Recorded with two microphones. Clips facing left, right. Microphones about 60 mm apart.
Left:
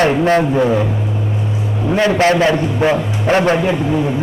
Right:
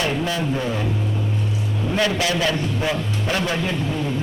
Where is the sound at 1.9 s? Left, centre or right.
Left.